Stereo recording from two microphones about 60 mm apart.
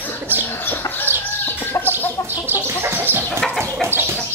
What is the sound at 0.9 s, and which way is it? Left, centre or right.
Chicken, left.